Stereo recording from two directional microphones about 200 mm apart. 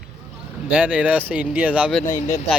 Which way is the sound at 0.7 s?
5° right (ahead or behind).